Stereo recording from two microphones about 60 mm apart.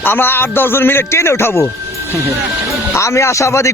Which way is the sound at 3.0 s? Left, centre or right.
Left.